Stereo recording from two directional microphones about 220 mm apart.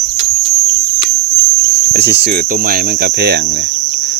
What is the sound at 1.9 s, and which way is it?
Cricket, 50° right (ahead or behind).